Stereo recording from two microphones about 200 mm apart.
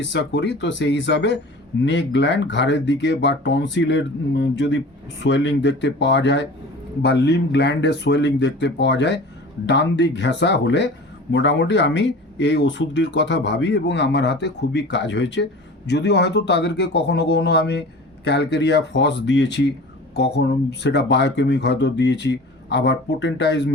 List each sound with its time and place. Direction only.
0.0 s speech: 60° left (ahead or behind)